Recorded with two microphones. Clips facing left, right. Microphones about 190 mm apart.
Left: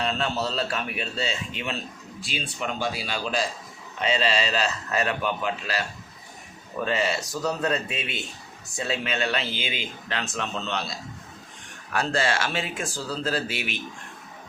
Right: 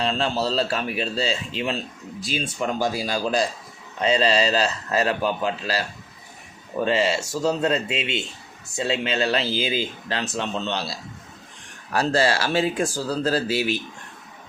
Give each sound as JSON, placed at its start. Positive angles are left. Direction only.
{"t": 0.0, "sound": "speech", "side_deg": -30}
{"t": 11.9, "sound": "speech", "side_deg": -35}